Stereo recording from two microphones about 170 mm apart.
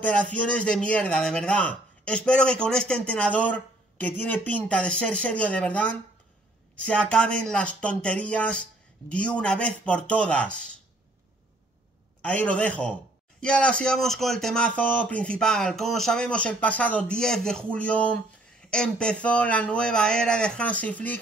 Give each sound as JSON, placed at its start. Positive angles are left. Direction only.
{"t": 0.0, "sound": "a man's voice", "side_deg": 5}
{"t": 12.2, "sound": "a man's voice", "side_deg": 5}